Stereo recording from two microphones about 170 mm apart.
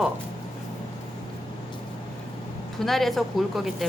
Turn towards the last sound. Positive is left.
turn(degrees=0)  # may be behind; listen again after turning